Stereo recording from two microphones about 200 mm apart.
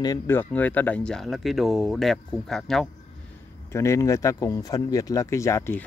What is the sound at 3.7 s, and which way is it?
Speech, 15° left (ahead or behind).